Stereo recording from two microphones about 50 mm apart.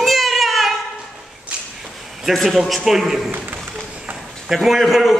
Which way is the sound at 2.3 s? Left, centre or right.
Centre.